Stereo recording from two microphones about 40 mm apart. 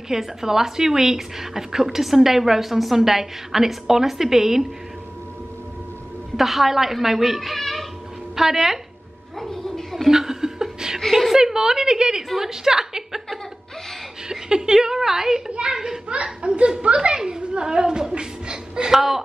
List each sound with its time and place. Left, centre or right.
0.1 s a woman's voice: centre
6.3 s a child's voice: centre
8.4 s a woman's voice: centre
9.4 s a sound: centre
10.0 s chuckle: centre
11.0 s a sound: centre
11.3 s a woman's voice: centre
14.3 s a woman's voice: centre
18.9 s a woman's voice: centre